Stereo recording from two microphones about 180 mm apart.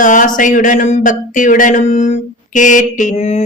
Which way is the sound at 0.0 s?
45° left (ahead or behind).